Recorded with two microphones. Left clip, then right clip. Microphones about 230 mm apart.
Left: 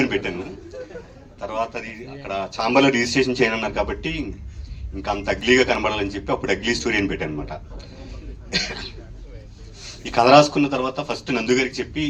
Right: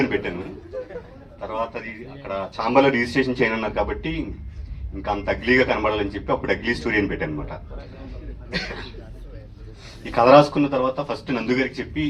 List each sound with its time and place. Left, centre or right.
0.0 s a man's voice: left
1.4 s a man's voice: left
10.0 s a man's voice: left